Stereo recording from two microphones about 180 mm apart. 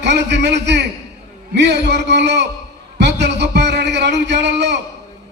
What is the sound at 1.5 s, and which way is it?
A man's voice, 70° right (ahead or behind).